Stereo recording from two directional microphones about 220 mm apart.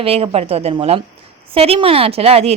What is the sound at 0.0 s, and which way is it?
A woman's voice, 25° right (ahead or behind).